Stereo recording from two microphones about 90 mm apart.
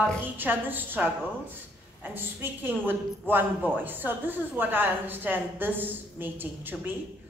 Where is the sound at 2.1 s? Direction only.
20° right (ahead or behind).